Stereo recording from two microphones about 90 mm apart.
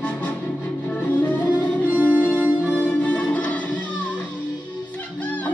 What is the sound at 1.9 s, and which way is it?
Music, 20° right (ahead or behind).